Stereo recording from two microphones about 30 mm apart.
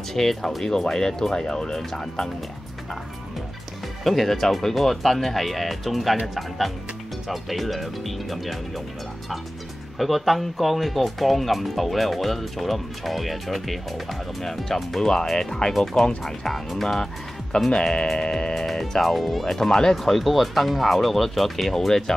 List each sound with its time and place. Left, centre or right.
0.1 s speech: centre
4.0 s speech: centre
9.9 s speech: centre
14.4 s speech: centre
17.6 s speech: left
18.5 s speech: centre
19.4 s speech: centre
20.0 s speech: centre